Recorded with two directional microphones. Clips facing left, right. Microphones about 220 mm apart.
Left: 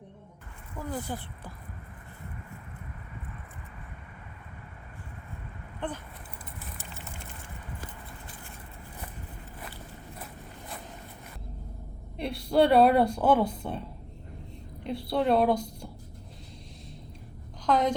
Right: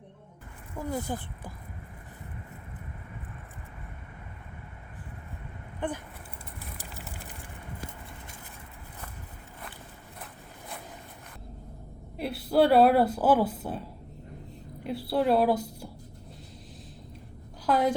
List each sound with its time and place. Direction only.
0.8 s speech: 15° right (ahead or behind)
5.8 s speech: 15° right (ahead or behind)
12.1 s a woman's voice: 5° right (ahead or behind)
14.8 s a woman's voice: 5° right (ahead or behind)
17.7 s a woman's voice: 5° right (ahead or behind)